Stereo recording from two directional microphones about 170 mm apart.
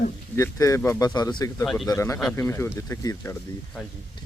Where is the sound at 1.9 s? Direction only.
20° left (ahead or behind).